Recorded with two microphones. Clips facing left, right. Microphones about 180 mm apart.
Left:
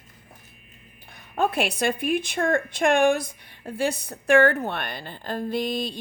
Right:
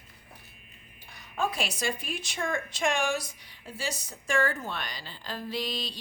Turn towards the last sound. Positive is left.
turn(degrees=50)  # may be behind; listen again after turning